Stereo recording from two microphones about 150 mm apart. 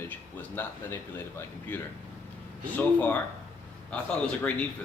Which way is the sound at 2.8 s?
10° left (ahead or behind).